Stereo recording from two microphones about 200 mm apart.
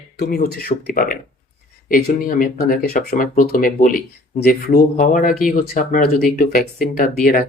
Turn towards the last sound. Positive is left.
turn(degrees=45)  # may be behind; listen again after turning